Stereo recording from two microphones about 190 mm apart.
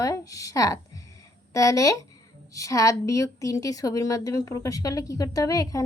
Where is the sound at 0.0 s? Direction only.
15° left (ahead or behind).